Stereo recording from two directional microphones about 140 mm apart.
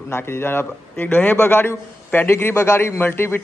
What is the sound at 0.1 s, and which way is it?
A man's voice, 20° left (ahead or behind).